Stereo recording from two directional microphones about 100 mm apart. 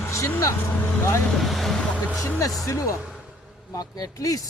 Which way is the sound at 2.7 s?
30° left (ahead or behind).